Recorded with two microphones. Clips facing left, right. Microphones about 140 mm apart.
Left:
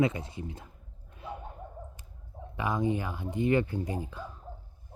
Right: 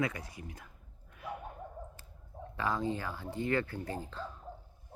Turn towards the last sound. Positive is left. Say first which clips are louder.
# left 3 dB
turn(degrees=10)  # may be behind; listen again after turning